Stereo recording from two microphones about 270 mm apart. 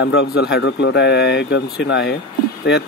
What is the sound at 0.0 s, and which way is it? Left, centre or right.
Speech, left.